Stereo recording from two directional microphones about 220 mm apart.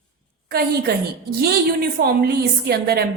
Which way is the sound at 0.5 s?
45° right (ahead or behind).